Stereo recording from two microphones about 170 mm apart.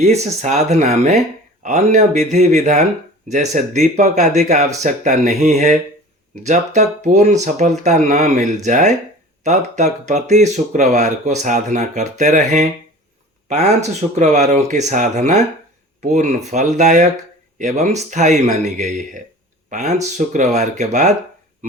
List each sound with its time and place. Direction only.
0.0 s speech: 40° right (ahead or behind)